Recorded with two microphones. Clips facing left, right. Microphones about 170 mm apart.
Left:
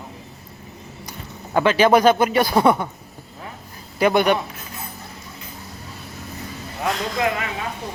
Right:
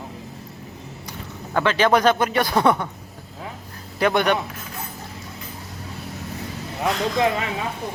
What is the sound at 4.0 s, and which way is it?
Speech, 5° left (ahead or behind).